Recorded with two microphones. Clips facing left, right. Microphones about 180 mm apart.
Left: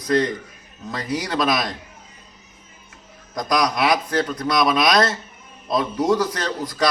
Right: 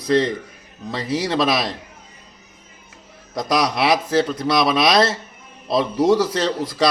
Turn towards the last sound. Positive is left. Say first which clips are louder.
# right 4 dB
turn(degrees=-30)  # may be behind; listen again after turning